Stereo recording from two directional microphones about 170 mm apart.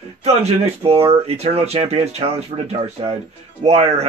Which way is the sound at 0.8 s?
35° right (ahead or behind).